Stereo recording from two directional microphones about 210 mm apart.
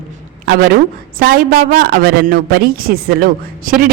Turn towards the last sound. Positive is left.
turn(degrees=-45)  # may be behind; listen again after turning